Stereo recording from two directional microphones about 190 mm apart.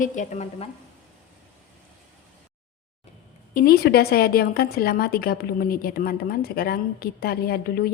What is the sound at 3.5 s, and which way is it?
A woman's voice, 55° left (ahead or behind).